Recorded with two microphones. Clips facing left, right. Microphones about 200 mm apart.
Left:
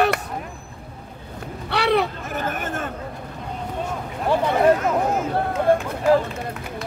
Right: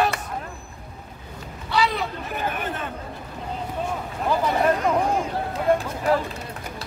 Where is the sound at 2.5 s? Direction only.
45° left (ahead or behind).